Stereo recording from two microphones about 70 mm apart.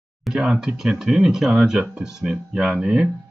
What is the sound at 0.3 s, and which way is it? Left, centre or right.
Speech, centre.